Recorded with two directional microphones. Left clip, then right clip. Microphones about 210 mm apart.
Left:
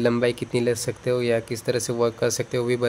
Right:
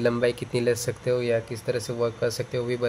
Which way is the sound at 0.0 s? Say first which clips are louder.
Left 2 dB; 15° left (ahead or behind).